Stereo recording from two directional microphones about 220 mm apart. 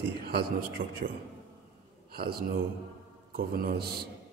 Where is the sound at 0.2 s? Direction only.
45° right (ahead or behind).